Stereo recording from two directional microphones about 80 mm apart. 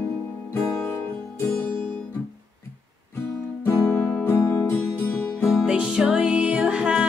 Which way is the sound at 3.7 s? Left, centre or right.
Left.